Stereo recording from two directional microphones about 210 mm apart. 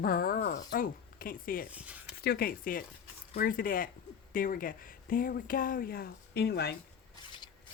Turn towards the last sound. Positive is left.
turn(degrees=50)  # may be behind; listen again after turning